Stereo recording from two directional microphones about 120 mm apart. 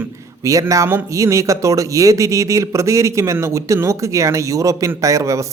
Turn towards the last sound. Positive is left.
turn(degrees=-25)  # may be behind; listen again after turning